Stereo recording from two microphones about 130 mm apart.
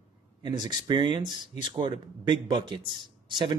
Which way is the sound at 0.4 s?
35° right (ahead or behind).